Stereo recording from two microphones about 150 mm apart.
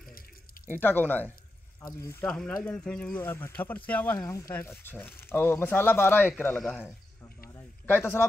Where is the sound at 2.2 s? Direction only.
5° left (ahead or behind).